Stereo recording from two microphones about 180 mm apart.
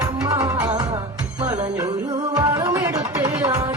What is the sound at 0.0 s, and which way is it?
Music, 20° right (ahead or behind).